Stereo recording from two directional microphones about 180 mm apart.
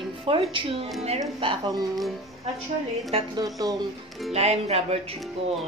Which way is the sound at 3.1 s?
20° right (ahead or behind).